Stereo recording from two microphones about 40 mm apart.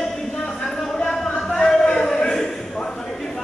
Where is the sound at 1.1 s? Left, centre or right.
Centre.